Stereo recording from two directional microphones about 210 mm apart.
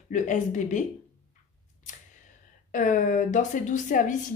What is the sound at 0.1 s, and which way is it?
Speech, 35° left (ahead or behind).